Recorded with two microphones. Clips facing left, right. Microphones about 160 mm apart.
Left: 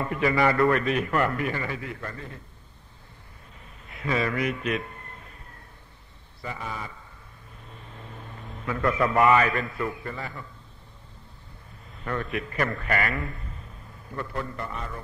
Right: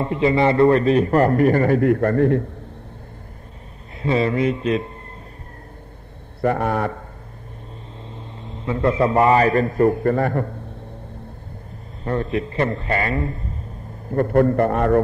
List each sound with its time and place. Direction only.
0.0 s a man's voice: 25° right (ahead or behind); by 2.4 s 65° right (ahead or behind)
4.0 s a man's voice: 30° right (ahead or behind)
6.4 s a man's voice: 60° right (ahead or behind)
8.0 s a man's voice: 25° right (ahead or behind); by 10.6 s 60° right (ahead or behind)
12.0 s a man's voice: 30° right (ahead or behind)
14.1 s a man's voice: 55° right (ahead or behind)